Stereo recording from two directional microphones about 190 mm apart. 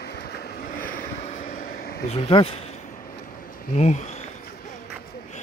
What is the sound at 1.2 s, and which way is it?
Vehicle, 40° left (ahead or behind).